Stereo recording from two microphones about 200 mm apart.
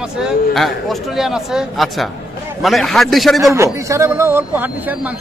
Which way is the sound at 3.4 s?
15° right (ahead or behind).